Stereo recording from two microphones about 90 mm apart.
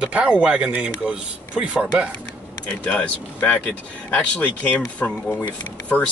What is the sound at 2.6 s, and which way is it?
Speech, 15° left (ahead or behind).